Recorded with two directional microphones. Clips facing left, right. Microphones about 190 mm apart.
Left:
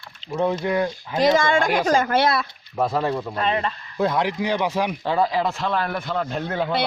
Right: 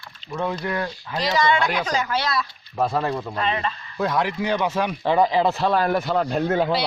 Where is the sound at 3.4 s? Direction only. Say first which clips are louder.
Left 2 dB; 50° left (ahead or behind).